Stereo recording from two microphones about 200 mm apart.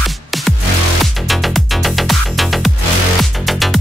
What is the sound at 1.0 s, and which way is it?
Music, centre (ahead or behind).